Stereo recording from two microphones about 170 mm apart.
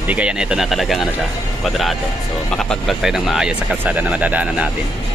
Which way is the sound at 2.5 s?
Centre (ahead or behind).